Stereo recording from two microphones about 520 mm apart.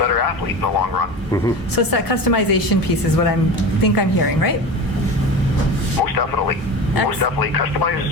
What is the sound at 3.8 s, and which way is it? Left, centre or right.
Speech, left.